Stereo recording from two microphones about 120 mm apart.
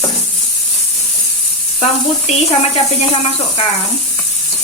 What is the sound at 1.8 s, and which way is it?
Speech, 60° left (ahead or behind).